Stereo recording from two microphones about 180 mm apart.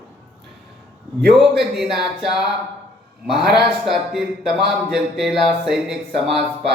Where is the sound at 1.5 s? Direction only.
Centre (ahead or behind).